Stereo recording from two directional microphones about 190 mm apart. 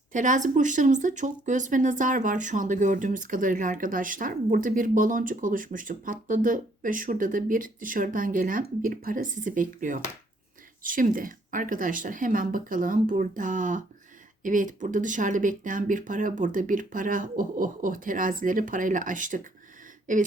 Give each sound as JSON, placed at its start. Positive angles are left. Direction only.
{"t": 0.1, "sound": "speech", "side_deg": -40}